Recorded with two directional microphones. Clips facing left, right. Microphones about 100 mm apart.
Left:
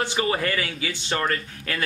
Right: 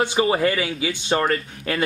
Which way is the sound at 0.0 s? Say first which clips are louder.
Right 5 dB; 20° right (ahead or behind).